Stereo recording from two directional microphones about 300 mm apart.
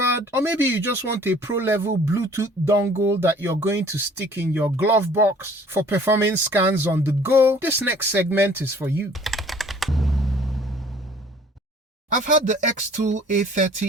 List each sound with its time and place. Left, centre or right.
0.3 s speech: centre
12.1 s speech: right